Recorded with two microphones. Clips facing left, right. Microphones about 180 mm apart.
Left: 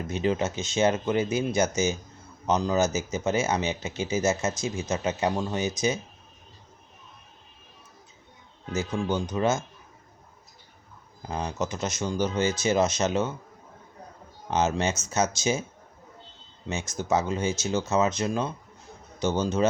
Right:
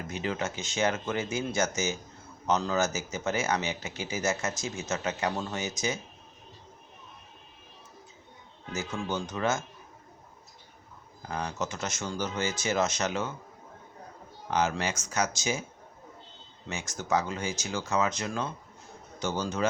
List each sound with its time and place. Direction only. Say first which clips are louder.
0.1 s speech: left 6 dB; 20° left (ahead or behind)
8.7 s speech: left 5 dB; 15° left (ahead or behind)
11.3 s speech: left 3 dB; 20° left (ahead or behind)
14.4 s speech: left 3 dB; 20° left (ahead or behind)
16.6 s speech: left 4 dB; 20° left (ahead or behind)